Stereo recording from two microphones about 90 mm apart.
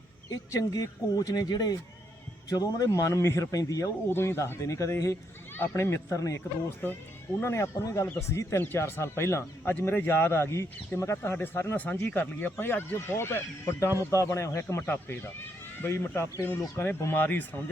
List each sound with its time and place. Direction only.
0.3 s a man's voice: 40° left (ahead or behind)
4.1 s a man's voice: 25° left (ahead or behind)
6.8 s a man's voice: 25° left (ahead or behind)